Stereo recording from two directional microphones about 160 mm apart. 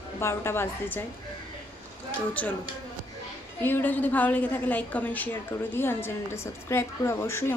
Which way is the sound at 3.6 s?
10° left (ahead or behind).